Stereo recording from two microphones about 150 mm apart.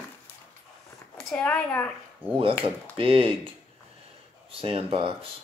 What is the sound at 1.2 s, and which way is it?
Speech, 5° left (ahead or behind).